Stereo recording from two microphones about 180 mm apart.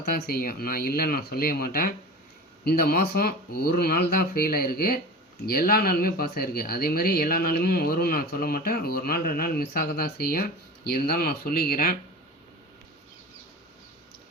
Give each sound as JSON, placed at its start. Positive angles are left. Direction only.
{"t": 0.1, "sound": "speech", "side_deg": 55}